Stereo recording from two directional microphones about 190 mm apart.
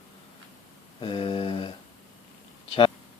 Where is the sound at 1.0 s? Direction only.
25° left (ahead or behind).